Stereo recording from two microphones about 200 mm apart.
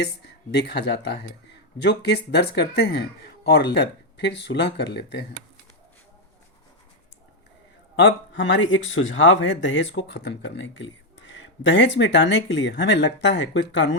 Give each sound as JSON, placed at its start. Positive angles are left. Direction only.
{"t": 0.5, "sound": "speech", "side_deg": 55}
{"t": 7.9, "sound": "speech", "side_deg": 70}